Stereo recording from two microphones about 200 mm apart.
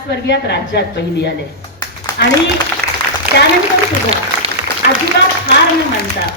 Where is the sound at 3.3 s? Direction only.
55° right (ahead or behind).